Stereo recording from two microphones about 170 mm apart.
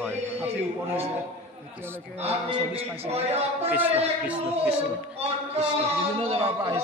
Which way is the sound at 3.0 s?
40° right (ahead or behind).